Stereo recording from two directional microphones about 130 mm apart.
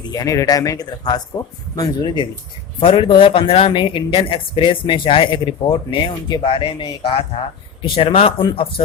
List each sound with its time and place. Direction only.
0.1 s speech: 25° left (ahead or behind)
2.8 s speech: 40° left (ahead or behind)